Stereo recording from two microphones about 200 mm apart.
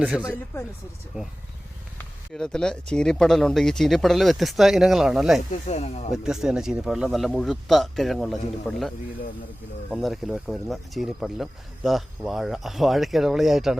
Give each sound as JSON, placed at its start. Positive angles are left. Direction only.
{"t": 0.0, "sound": "speech", "side_deg": -5}
{"t": 5.6, "sound": "speech", "side_deg": 35}
{"t": 6.1, "sound": "speech", "side_deg": 0}
{"t": 9.9, "sound": "speech", "side_deg": 0}